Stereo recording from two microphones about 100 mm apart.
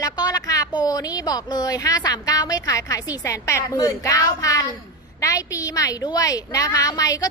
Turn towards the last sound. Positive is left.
turn(degrees=35)  # may be behind; listen again after turning